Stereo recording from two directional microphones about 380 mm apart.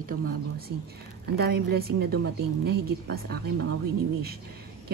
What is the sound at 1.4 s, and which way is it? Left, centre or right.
Speech, right.